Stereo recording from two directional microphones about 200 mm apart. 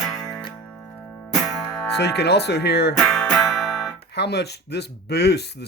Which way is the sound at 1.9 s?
55° left (ahead or behind).